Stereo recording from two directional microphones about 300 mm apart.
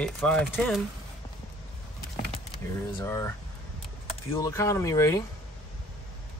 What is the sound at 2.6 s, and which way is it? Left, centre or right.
Speech, centre.